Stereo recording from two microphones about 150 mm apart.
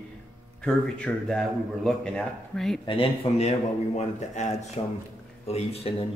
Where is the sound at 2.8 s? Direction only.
35° left (ahead or behind).